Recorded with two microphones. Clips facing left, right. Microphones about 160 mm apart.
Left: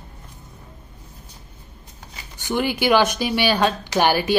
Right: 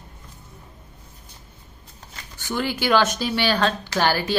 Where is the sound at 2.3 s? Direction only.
15° left (ahead or behind).